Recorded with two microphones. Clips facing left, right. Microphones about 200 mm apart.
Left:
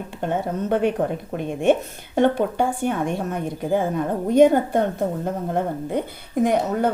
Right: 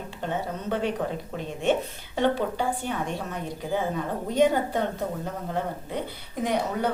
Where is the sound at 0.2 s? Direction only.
55° left (ahead or behind).